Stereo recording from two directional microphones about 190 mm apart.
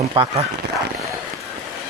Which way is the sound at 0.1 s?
25° right (ahead or behind).